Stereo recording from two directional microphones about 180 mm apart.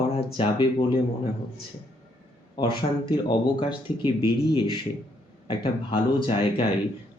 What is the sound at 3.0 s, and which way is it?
Speech, 25° left (ahead or behind).